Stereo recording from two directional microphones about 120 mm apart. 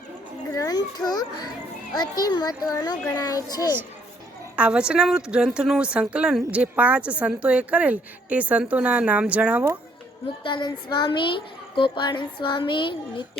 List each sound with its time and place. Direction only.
0.5 s a child's voice: 30° left (ahead or behind)
4.5 s a woman's voice: 10° right (ahead or behind)
10.4 s a child's voice: 40° left (ahead or behind)